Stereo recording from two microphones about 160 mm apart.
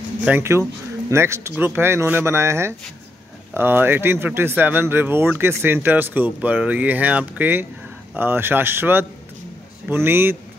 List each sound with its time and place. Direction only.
0.2 s speech: 15° right (ahead or behind)